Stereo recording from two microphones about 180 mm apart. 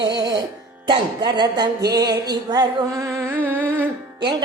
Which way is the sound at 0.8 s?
25° right (ahead or behind).